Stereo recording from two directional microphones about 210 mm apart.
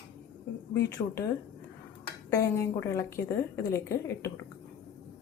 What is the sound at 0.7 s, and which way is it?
Speech, 15° left (ahead or behind).